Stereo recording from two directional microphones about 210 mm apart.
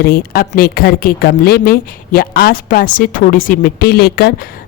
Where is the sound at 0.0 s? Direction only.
45° left (ahead or behind).